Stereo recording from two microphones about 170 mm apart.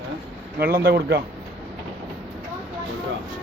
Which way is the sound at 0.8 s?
70° right (ahead or behind).